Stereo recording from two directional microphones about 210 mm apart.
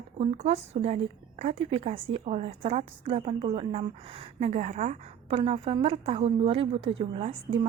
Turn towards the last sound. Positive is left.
turn(degrees=-30)  # may be behind; listen again after turning